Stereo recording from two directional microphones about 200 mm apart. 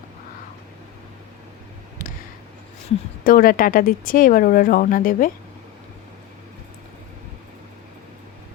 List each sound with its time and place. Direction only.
3.2 s speech: 45° left (ahead or behind)